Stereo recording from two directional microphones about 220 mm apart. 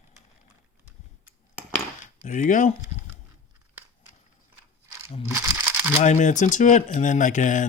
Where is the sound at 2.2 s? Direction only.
35° left (ahead or behind).